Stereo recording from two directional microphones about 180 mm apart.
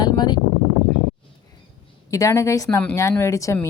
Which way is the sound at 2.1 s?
15° left (ahead or behind).